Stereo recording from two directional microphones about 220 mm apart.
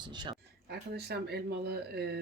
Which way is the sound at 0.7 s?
45° right (ahead or behind).